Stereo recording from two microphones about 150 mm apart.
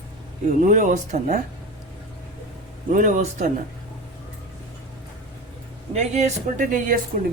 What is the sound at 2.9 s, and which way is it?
Speech, 60° right (ahead or behind).